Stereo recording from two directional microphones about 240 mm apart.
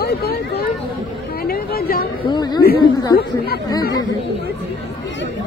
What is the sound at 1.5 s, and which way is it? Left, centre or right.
Chatter, left.